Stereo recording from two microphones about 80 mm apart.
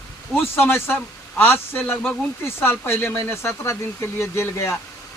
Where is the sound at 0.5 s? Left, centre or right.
Left.